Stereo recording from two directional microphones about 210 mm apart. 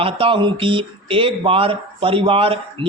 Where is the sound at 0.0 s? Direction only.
25° right (ahead or behind).